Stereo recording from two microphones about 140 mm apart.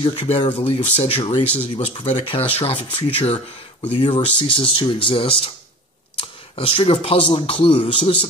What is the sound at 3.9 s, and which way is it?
Speech, 35° left (ahead or behind).